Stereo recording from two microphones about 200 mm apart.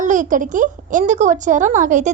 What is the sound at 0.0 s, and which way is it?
A woman's voice, 40° right (ahead or behind).